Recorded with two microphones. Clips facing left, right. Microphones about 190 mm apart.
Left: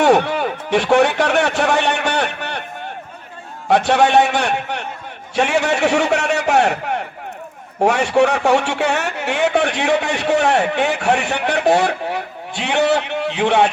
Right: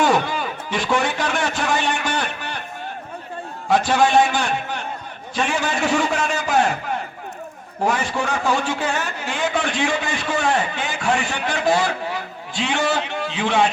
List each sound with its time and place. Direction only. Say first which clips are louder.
0.0 s speech: left 5 dB; 65° left (ahead or behind)
3.7 s a man's voice: left 3 dB; 65° left (ahead or behind)